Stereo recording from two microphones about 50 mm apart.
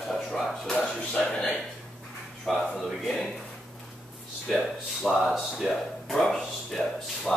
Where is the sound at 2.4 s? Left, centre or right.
Centre.